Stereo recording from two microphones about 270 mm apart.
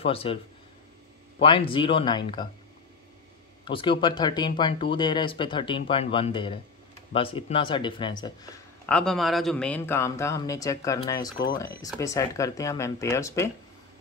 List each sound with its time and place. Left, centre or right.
0.0 s speech: left
1.4 s speech: centre
3.6 s speech: centre
8.8 s speech: centre